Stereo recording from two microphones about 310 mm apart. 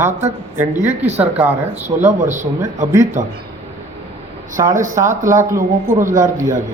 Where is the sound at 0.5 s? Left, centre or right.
Centre.